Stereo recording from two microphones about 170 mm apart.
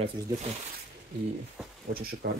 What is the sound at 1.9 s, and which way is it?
Speech, 60° right (ahead or behind).